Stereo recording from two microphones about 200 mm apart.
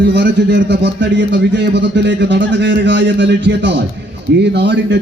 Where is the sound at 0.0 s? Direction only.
60° right (ahead or behind).